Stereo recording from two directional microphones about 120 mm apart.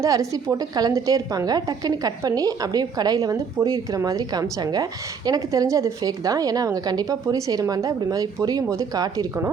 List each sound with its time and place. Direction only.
0.0 s a woman's voice: 25° right (ahead or behind)